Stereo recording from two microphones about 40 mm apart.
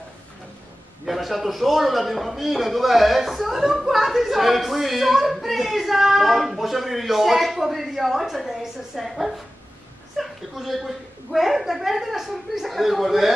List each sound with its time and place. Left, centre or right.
1.0 s a man's voice: centre
10.1 s a sound: centre
11.3 s a man's voice: centre